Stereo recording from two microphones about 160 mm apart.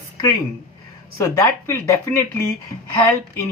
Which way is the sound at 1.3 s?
15° left (ahead or behind).